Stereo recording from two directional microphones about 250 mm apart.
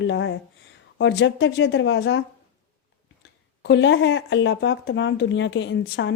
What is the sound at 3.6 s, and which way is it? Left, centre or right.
Speech, left.